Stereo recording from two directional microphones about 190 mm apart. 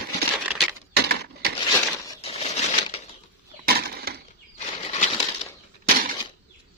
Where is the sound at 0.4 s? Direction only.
10° right (ahead or behind).